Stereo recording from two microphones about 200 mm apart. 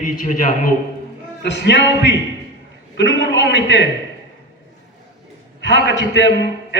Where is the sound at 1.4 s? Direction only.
60° left (ahead or behind).